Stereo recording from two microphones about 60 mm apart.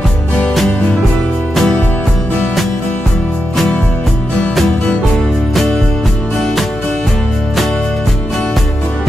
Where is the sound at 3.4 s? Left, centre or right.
Centre.